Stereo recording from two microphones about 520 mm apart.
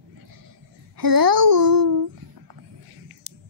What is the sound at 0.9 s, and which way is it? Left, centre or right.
A woman's voice, right.